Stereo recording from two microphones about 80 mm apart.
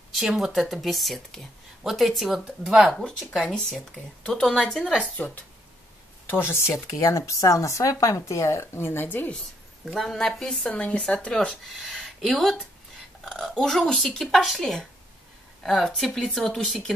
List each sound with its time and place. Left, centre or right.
0.2 s speech: centre
2.9 s speech: centre
5.1 s speech: left
9.9 s speech: centre
10.7 s speech: centre